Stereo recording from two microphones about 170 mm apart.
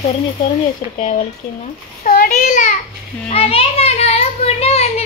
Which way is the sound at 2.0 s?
50° left (ahead or behind).